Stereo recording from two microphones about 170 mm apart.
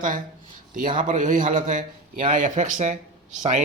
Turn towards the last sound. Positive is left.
turn(degrees=-45)  # may be behind; listen again after turning